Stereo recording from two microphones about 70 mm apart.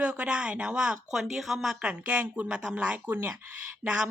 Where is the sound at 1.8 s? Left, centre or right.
Centre.